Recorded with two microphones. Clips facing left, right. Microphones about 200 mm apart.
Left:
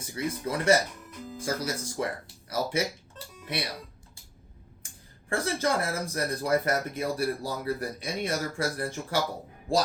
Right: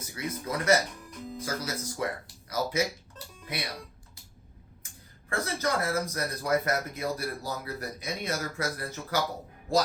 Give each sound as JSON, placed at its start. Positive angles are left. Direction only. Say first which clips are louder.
{"t": 0.0, "sound": "speech", "louder": "left 4 dB", "side_deg": 30}
{"t": 1.2, "sound": "speech", "louder": "right 1 dB", "side_deg": 0}
{"t": 1.5, "sound": "speech", "louder": "left 4 dB", "side_deg": 30}
{"t": 5.3, "sound": "speech", "louder": "left 2 dB", "side_deg": 30}